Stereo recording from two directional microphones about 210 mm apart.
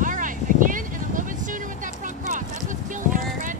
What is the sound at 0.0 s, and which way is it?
Vehicle, 40° right (ahead or behind).